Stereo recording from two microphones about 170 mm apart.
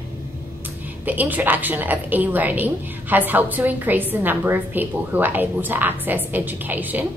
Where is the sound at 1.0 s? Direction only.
10° right (ahead or behind).